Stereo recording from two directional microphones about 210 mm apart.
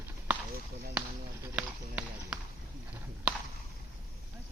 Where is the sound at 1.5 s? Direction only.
5° right (ahead or behind).